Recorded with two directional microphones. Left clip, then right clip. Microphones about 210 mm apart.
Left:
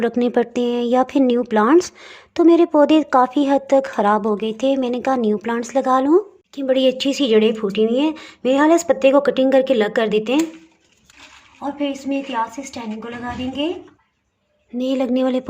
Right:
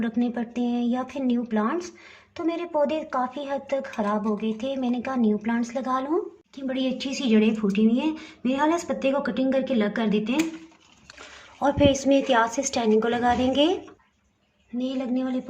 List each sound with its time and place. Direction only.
0.0 s speech: 45° left (ahead or behind)
11.6 s a woman's voice: 30° right (ahead or behind)
14.8 s a man's voice: 35° left (ahead or behind)